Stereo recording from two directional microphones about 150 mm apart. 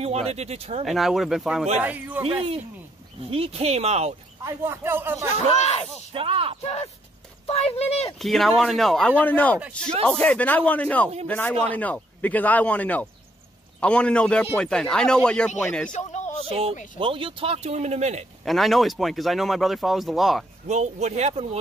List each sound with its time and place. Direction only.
0.0 s speech: 45° right (ahead or behind)
0.8 s speech: centre (ahead or behind)
3.3 s speech: 40° right (ahead or behind)
4.5 s speech: 15° right (ahead or behind)
5.6 s speech: 45° left (ahead or behind)
6.1 s speech: 40° right (ahead or behind)
6.6 s speech: 45° left (ahead or behind)
8.2 s speech: centre (ahead or behind)
15.9 s speech: 50° left (ahead or behind)
16.4 s speech: 40° right (ahead or behind)
18.4 s speech: centre (ahead or behind)
20.6 s speech: 50° right (ahead or behind)